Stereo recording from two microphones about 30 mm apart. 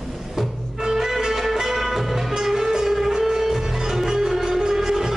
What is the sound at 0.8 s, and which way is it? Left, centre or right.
Music, centre.